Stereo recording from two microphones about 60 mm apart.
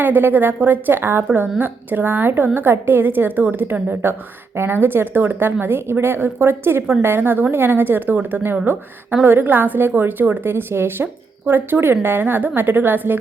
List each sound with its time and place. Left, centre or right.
0.0 s a woman's voice: right